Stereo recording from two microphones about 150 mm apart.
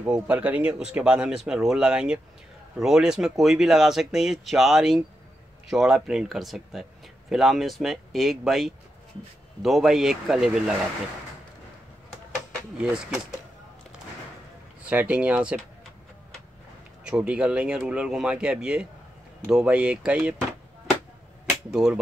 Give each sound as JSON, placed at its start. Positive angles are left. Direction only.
{"t": 0.0, "sound": "speech", "side_deg": -10}
{"t": 12.7, "sound": "speech", "side_deg": -5}
{"t": 14.8, "sound": "speech", "side_deg": -10}
{"t": 17.0, "sound": "speech", "side_deg": -5}
{"t": 21.6, "sound": "speech", "side_deg": -5}